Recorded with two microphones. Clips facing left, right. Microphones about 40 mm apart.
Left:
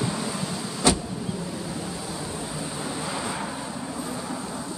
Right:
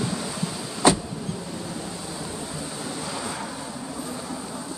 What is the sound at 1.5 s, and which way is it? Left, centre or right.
Vehicle, centre.